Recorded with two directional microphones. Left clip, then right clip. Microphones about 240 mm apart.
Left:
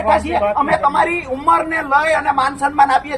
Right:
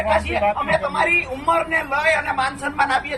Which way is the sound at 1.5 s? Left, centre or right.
Centre.